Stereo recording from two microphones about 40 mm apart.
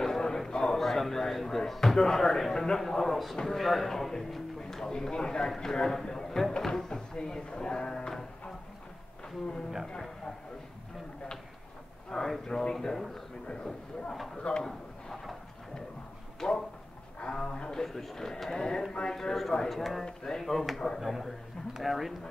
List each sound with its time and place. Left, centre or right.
0.0 s a sound: centre
0.7 s a sound: centre
1.7 s speech: centre
12.1 s speech: centre
12.5 s speech: left
12.8 s speech: centre
13.5 s speech: centre
16.3 s speech: centre
17.8 s speech: centre
19.1 s speech: centre
20.4 s speech: centre